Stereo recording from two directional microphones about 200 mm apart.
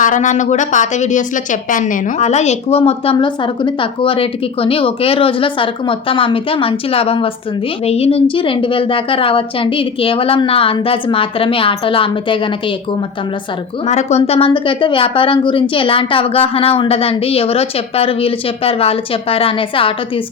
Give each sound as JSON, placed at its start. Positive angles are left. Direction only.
{"t": 0.0, "sound": "a woman's voice", "side_deg": 40}
{"t": 13.8, "sound": "a woman's voice", "side_deg": 35}